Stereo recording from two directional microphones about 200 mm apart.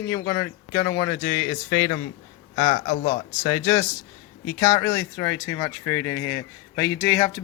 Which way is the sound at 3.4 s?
15° left (ahead or behind).